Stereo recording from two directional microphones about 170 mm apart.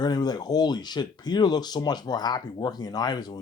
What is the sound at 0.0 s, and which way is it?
Speech, 25° left (ahead or behind).